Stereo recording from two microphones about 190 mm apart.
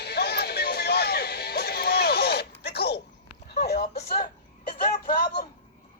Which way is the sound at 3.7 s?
40° left (ahead or behind).